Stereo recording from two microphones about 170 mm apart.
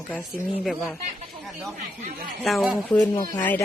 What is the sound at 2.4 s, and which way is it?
Speech, centre (ahead or behind).